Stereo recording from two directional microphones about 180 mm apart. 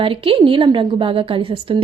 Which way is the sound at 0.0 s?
30° right (ahead or behind).